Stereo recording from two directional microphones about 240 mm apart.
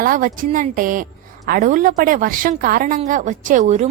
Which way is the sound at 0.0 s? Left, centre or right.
Right.